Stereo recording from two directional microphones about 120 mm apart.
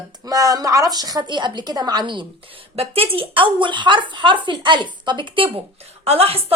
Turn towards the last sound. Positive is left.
turn(degrees=-55)  # may be behind; listen again after turning